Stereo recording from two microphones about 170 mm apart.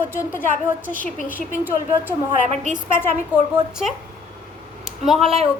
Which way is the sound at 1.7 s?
10° right (ahead or behind).